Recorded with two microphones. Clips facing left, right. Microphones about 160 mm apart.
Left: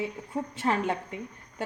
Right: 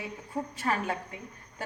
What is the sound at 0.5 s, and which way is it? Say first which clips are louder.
Speech: left 4 dB; 25° left (ahead or behind).